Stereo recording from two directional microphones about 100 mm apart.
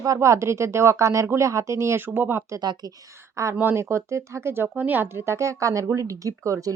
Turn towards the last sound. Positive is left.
turn(degrees=-35)  # may be behind; listen again after turning